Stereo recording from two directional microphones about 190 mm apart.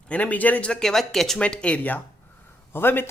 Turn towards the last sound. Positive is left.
turn(degrees=10)  # may be behind; listen again after turning